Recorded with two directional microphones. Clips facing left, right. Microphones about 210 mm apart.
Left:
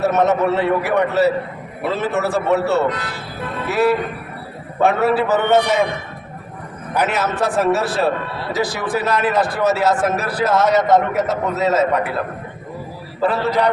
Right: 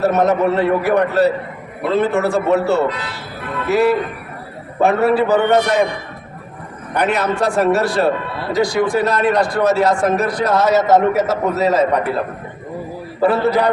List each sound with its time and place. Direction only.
0.0 s a man's voice: centre (ahead or behind)
6.9 s a man's voice: 5° left (ahead or behind)
13.2 s a man's voice: 10° right (ahead or behind)